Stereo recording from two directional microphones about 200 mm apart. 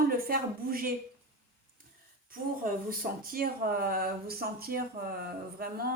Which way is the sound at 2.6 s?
45° right (ahead or behind).